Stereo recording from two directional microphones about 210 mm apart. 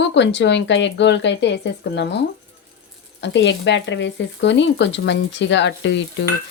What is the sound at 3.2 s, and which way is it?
Speech, 55° left (ahead or behind).